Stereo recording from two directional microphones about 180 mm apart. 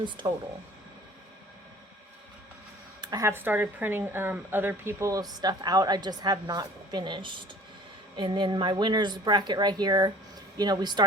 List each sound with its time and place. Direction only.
0.0 s speech: 25° right (ahead or behind)
3.0 s speech: 20° right (ahead or behind)